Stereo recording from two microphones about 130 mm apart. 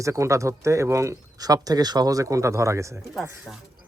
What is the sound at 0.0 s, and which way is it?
A man's voice, 25° right (ahead or behind).